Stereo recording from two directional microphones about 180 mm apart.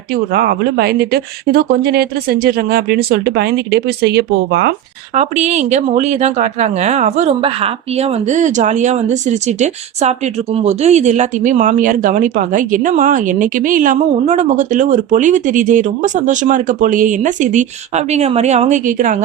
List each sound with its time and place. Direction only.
0.3 s speech: 60° right (ahead or behind)
5.1 s speech: 40° right (ahead or behind)